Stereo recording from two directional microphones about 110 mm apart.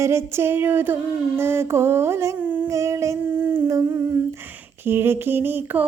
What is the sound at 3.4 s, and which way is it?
Humming, 25° right (ahead or behind).